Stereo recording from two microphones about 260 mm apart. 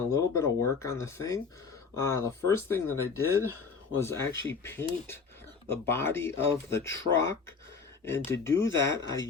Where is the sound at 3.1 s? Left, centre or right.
Left.